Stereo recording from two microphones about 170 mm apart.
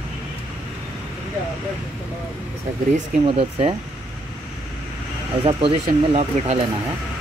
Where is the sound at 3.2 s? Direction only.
35° right (ahead or behind).